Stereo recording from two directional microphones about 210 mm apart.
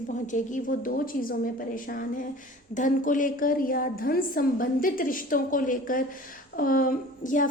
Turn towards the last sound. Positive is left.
turn(degrees=40)  # may be behind; listen again after turning